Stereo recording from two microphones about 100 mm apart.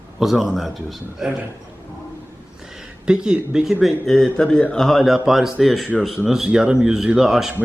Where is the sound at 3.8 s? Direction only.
5° left (ahead or behind).